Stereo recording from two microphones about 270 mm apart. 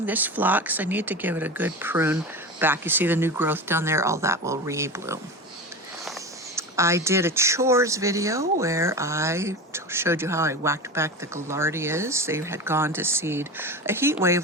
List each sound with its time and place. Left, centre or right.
0.0 s speech: centre
6.6 s speech: centre